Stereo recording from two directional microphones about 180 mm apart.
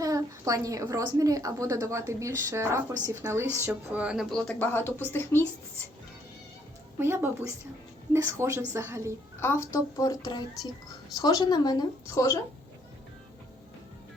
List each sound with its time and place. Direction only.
0.0 s a woman's voice: 20° right (ahead or behind); by 5.4 s 10° left (ahead or behind)
7.0 s a woman's voice: 15° right (ahead or behind)
9.4 s speech: 15° left (ahead or behind)